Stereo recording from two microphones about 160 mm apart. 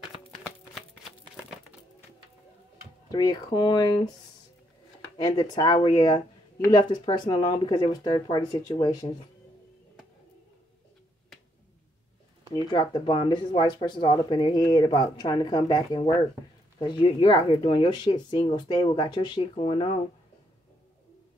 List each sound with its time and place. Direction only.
0.7 s shuffling cards: centre (ahead or behind)
3.1 s speech: 25° left (ahead or behind)
5.1 s speech: 30° left (ahead or behind)
12.5 s speech: 30° left (ahead or behind)